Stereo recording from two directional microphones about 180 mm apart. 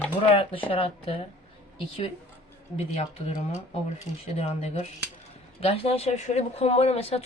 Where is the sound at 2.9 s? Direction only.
35° left (ahead or behind).